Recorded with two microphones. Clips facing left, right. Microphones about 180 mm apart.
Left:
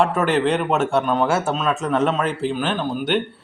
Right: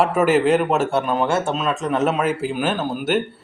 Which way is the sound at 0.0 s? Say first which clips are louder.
Right 2 dB; 5° right (ahead or behind).